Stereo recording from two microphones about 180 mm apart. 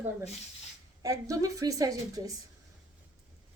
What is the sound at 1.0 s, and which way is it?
A woman's voice, 20° right (ahead or behind).